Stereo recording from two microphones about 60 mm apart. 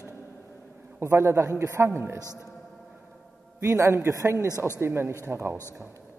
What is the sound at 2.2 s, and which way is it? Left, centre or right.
Speech, left.